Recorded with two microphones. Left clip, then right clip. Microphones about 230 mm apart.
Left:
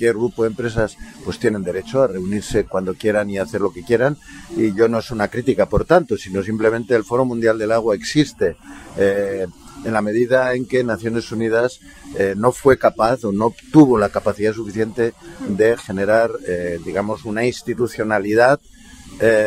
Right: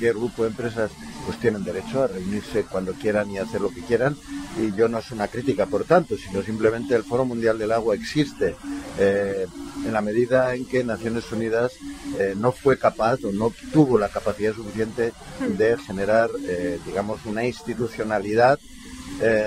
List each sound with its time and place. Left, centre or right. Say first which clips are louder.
0.0 s speech: left 5 dB; left